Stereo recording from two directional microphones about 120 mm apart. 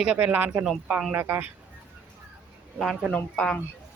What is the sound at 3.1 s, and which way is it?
Speech, 10° left (ahead or behind).